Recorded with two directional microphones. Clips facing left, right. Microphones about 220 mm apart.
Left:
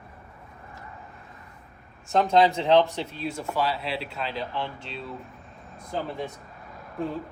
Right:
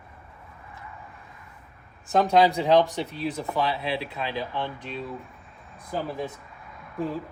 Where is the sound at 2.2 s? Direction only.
15° right (ahead or behind).